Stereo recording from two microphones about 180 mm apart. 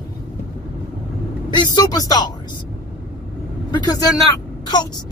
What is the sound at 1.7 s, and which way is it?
Speech, 20° left (ahead or behind).